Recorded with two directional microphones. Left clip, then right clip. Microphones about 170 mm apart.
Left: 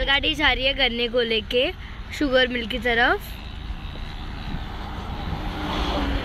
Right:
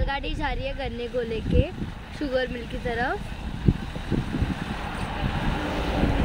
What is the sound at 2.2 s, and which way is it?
Speech, 30° left (ahead or behind).